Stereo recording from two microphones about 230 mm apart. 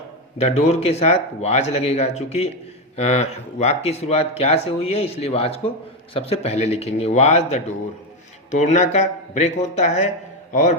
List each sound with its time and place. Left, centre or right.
0.3 s speech: left